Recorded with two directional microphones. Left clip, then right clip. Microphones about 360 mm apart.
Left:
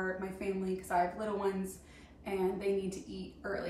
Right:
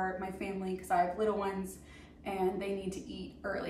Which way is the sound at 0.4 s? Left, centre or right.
Centre.